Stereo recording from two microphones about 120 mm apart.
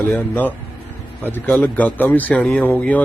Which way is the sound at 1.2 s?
15° left (ahead or behind).